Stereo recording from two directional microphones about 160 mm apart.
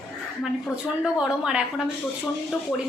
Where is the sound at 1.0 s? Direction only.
5° right (ahead or behind).